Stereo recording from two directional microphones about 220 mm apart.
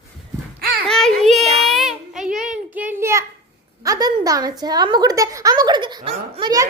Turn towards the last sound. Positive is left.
turn(degrees=-20)  # may be behind; listen again after turning